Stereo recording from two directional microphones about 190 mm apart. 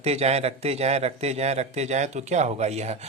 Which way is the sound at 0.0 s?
35° right (ahead or behind).